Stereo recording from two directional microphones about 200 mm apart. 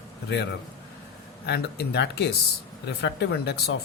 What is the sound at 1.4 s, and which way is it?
A man's voice, 55° left (ahead or behind).